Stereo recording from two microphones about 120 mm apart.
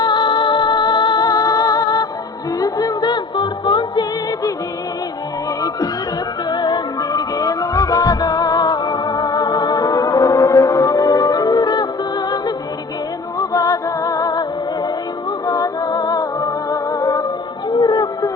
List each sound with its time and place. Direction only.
0.0 s music: 40° left (ahead or behind)
6.5 s music: 35° left (ahead or behind)
13.4 s music: 30° left (ahead or behind)
15.4 s music: 30° left (ahead or behind)
17.7 s a sound: 35° left (ahead or behind)